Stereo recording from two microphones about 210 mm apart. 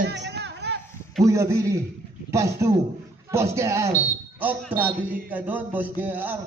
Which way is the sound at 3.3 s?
15° right (ahead or behind).